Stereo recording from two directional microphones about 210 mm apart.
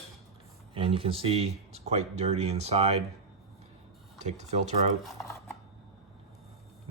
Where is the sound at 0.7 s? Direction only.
25° right (ahead or behind).